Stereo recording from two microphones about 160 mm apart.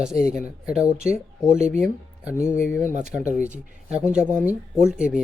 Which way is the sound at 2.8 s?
50° right (ahead or behind).